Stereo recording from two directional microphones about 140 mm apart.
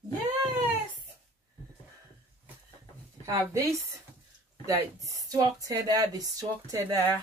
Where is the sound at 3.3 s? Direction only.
20° right (ahead or behind).